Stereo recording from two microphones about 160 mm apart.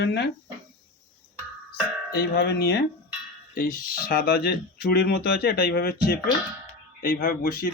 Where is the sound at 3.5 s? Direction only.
60° left (ahead or behind).